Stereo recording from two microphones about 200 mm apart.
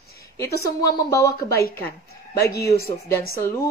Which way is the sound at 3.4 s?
15° left (ahead or behind).